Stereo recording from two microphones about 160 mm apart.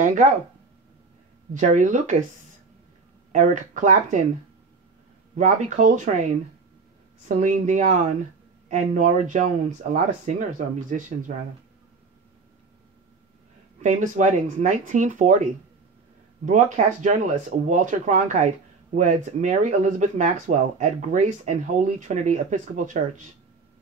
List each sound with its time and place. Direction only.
1.5 s speech: 50° right (ahead or behind)
3.3 s speech: 50° right (ahead or behind)
5.4 s speech: 50° right (ahead or behind)
7.2 s speech: 50° right (ahead or behind)
13.7 s speech: 50° right (ahead or behind)
16.4 s speech: 50° right (ahead or behind)